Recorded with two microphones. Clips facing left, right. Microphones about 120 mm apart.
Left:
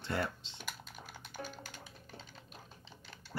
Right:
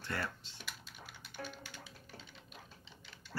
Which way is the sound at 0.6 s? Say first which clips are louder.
Left 4 dB; 45° left (ahead or behind).